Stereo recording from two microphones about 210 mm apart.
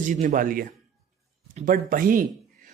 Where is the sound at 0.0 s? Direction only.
35° right (ahead or behind).